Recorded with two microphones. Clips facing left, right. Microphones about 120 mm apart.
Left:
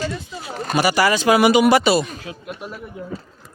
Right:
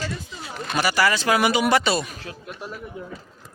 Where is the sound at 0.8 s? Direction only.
15° left (ahead or behind).